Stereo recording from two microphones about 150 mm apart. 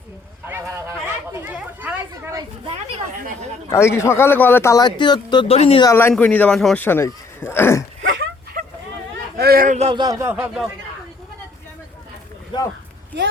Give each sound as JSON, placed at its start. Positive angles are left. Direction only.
{"t": 0.4, "sound": "speech", "side_deg": -15}
{"t": 2.6, "sound": "speech", "side_deg": -45}
{"t": 3.7, "sound": "speech", "side_deg": 15}
{"t": 5.8, "sound": "speech", "side_deg": 15}
{"t": 6.7, "sound": "speech", "side_deg": 15}
{"t": 9.4, "sound": "speech", "side_deg": -80}
{"t": 9.9, "sound": "speech", "side_deg": -30}
{"t": 10.2, "sound": "speech", "side_deg": -15}
{"t": 12.5, "sound": "speech", "side_deg": 30}